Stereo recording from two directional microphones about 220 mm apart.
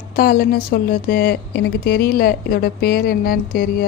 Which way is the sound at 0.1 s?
40° left (ahead or behind).